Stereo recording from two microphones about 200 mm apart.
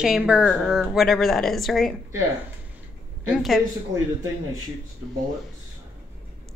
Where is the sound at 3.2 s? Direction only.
Centre (ahead or behind).